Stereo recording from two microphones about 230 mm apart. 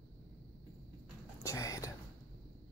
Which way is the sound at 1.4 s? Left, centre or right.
Centre.